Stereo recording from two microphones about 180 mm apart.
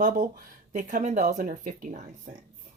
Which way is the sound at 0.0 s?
45° right (ahead or behind).